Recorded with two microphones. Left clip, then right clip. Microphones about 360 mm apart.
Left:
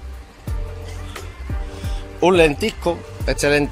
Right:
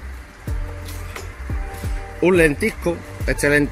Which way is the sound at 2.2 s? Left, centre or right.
Centre.